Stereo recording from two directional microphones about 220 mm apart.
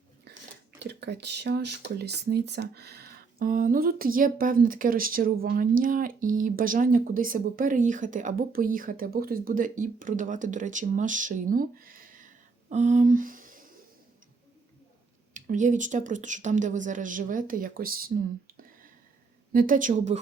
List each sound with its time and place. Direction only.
0.8 s speech: 50° right (ahead or behind)
15.3 s speech: 35° right (ahead or behind)
19.5 s speech: 40° right (ahead or behind)